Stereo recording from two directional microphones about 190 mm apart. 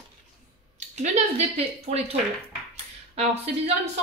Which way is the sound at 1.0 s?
35° right (ahead or behind).